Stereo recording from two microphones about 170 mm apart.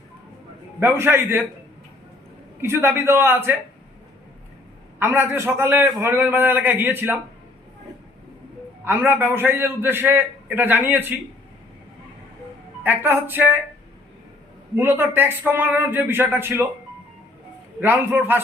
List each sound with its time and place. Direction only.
0.8 s a man's voice: 15° right (ahead or behind)
2.6 s a man's voice: 15° right (ahead or behind)
4.9 s a man's voice: 10° right (ahead or behind)
8.8 s a man's voice: 10° right (ahead or behind)
12.8 s a man's voice: 10° right (ahead or behind)
14.8 s a man's voice: 10° right (ahead or behind)
17.7 s a man's voice: 10° right (ahead or behind)